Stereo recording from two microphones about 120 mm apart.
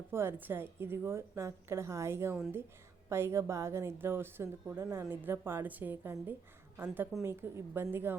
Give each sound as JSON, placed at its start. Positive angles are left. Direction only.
{"t": 0.1, "sound": "a woman's voice", "side_deg": -20}